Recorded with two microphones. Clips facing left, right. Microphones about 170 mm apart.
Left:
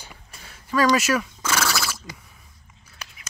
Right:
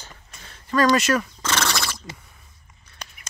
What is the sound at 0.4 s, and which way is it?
Neigh, 10° left (ahead or behind).